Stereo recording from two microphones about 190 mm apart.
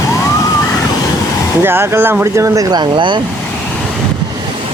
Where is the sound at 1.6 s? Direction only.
10° right (ahead or behind).